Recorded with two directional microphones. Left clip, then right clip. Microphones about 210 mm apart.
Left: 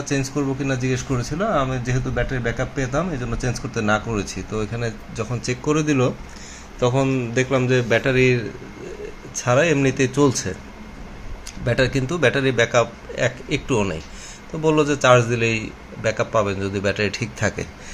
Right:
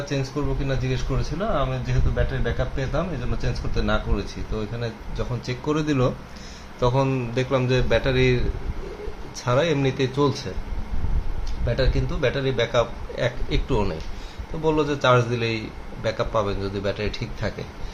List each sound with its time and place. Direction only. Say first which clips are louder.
0.1 s speech: left 7 dB; 25° left (ahead or behind)
5.8 s a man's voice: left 3 dB; 10° left (ahead or behind)
9.4 s speech: left 4 dB; 20° left (ahead or behind)
11.6 s speech: left 5 dB; 35° left (ahead or behind)